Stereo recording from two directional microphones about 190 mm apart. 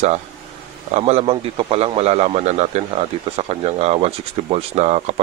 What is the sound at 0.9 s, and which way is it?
A man's voice, 35° right (ahead or behind).